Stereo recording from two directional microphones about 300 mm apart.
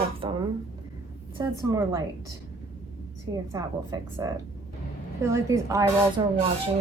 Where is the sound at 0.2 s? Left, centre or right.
Centre.